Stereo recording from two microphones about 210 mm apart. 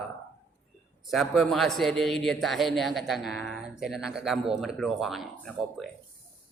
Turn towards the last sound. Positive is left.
turn(degrees=0)  # may be behind; listen again after turning